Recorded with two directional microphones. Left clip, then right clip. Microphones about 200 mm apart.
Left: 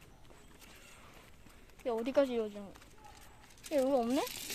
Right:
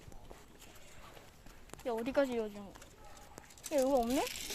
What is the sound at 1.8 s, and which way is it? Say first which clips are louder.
Speech: left 2 dB; 20° left (ahead or behind).